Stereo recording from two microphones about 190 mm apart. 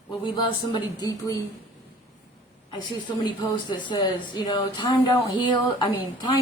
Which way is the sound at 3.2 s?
25° left (ahead or behind).